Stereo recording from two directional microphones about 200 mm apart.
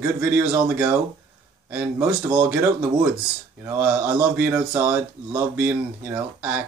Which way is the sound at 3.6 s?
10° right (ahead or behind).